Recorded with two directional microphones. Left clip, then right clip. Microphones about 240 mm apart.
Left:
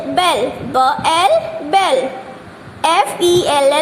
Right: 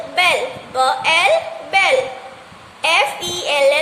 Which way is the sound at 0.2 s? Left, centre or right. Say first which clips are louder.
Left 1 dB; centre.